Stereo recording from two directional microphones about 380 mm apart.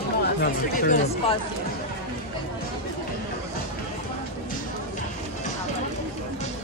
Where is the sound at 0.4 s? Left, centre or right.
Left.